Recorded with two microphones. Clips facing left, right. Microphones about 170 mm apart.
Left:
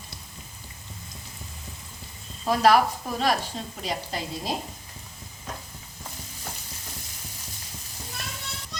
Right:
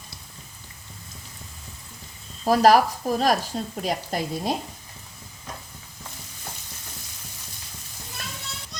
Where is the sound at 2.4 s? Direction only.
40° right (ahead or behind).